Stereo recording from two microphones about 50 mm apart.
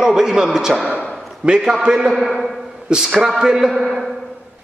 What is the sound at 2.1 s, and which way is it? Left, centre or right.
Speech, centre.